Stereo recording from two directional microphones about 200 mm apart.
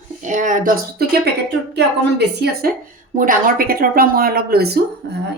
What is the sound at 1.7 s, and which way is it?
A woman's voice, 60° right (ahead or behind).